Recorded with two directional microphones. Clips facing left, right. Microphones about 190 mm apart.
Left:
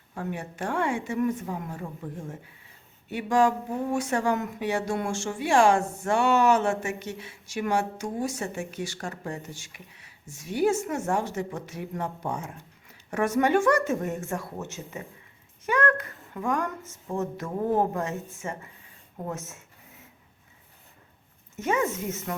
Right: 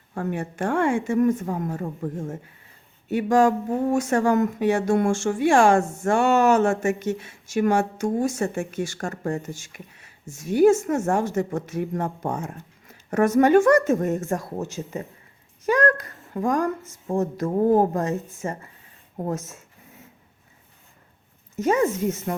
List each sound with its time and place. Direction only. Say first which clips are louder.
0.1 s speech: right 6 dB; 50° right (ahead or behind)
21.6 s speech: right 6 dB; 35° right (ahead or behind)